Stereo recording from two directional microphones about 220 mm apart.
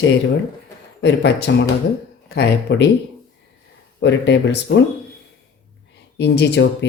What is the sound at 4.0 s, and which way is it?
Speech, 55° left (ahead or behind).